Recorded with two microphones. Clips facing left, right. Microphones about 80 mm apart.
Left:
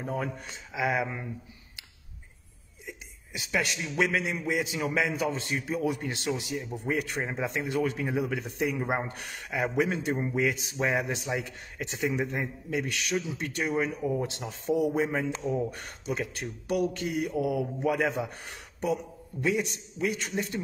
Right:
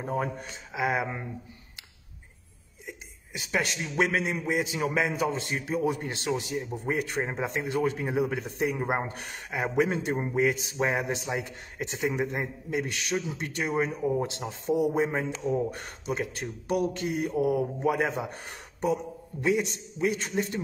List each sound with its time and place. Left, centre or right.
0.0 s speech: right
2.9 s a man's voice: right